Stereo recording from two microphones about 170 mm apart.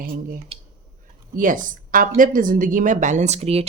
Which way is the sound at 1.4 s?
50° right (ahead or behind).